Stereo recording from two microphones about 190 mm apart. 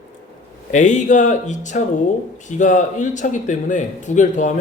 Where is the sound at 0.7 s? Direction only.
40° left (ahead or behind).